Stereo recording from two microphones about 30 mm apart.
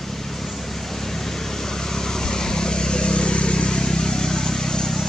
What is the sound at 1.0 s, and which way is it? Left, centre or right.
Vehicle, centre.